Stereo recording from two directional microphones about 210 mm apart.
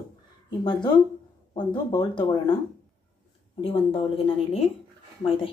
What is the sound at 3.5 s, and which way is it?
A woman's voice, 25° left (ahead or behind).